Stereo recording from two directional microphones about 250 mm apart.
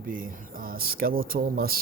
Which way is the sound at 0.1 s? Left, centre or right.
Right.